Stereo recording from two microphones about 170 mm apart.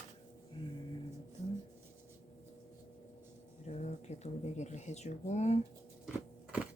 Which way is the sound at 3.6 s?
40° left (ahead or behind).